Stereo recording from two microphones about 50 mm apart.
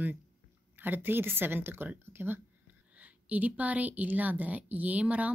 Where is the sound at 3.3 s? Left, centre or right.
Right.